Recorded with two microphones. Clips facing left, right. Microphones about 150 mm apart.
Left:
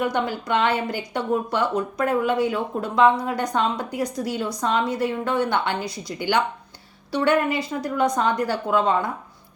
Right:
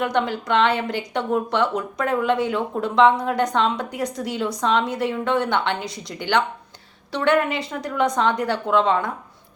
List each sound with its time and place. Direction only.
0.0 s speech: 5° left (ahead or behind)